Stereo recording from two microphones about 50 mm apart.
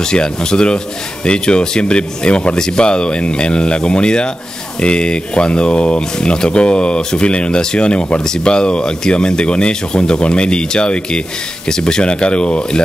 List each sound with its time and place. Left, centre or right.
0.0 s speech: centre